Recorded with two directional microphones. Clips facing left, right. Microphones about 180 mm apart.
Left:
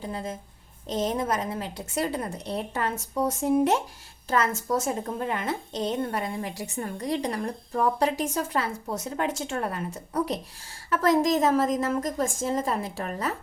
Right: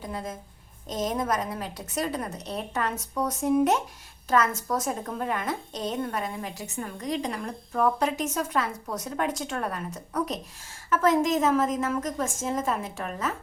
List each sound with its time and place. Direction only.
0.0 s a woman's voice: 25° left (ahead or behind)